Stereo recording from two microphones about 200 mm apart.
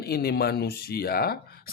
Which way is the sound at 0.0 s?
50° left (ahead or behind).